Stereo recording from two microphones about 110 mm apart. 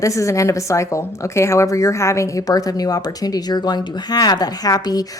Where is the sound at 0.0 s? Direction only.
30° left (ahead or behind).